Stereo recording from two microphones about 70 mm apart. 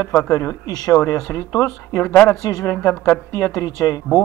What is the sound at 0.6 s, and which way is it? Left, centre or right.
Speech, left.